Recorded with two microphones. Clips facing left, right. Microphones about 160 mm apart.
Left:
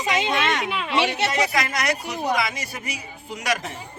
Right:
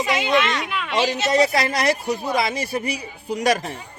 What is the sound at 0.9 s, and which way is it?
Speech, 65° left (ahead or behind).